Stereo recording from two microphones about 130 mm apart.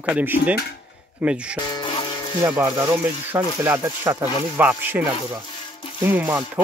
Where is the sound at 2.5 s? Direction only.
20° right (ahead or behind).